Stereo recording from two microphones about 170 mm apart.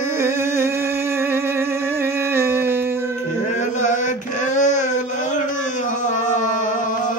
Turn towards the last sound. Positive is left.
turn(degrees=50)  # may be behind; listen again after turning